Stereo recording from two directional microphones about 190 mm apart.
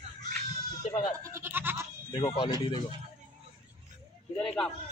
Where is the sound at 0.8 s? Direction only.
40° left (ahead or behind).